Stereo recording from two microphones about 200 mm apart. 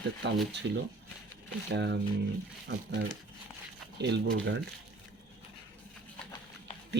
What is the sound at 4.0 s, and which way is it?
Speech, 60° right (ahead or behind).